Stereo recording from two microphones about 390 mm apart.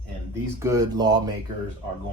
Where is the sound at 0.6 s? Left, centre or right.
Centre.